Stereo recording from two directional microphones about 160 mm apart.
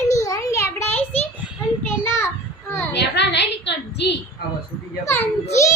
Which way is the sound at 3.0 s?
90° left.